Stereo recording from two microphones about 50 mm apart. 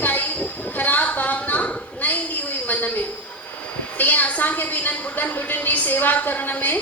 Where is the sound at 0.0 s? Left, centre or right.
Left.